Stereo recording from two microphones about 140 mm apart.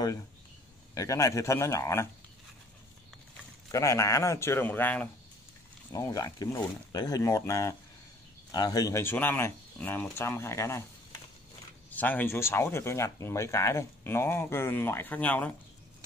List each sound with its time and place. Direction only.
0.9 s speech: 25° left (ahead or behind)
3.7 s speech: 20° left (ahead or behind)
5.9 s speech: 25° left (ahead or behind)